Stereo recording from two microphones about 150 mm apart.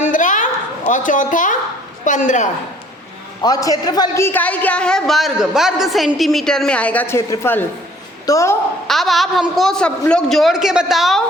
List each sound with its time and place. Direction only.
0.0 s a sound: 60° left (ahead or behind)
0.9 s a woman's voice: 60° left (ahead or behind)
3.4 s a woman's voice: 25° left (ahead or behind)
8.9 s a man's voice: centre (ahead or behind)